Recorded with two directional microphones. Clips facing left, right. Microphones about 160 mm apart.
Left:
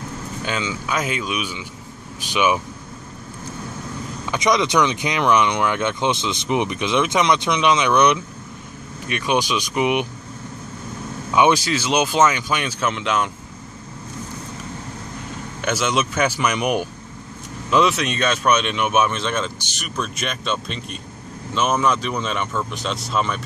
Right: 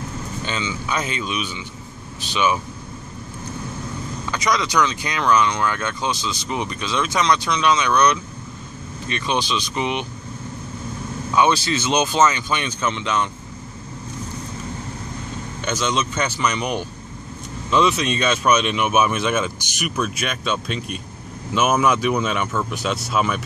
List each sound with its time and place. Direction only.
0.5 s speech: 5° left (ahead or behind)
4.3 s speech: 20° left (ahead or behind)
11.3 s speech: 15° left (ahead or behind)
15.6 s speech: 5° left (ahead or behind)